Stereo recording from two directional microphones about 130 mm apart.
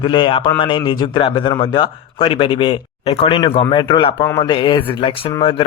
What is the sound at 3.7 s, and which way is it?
Speech, 40° left (ahead or behind).